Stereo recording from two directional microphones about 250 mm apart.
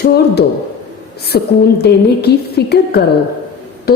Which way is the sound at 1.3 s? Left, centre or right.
Left.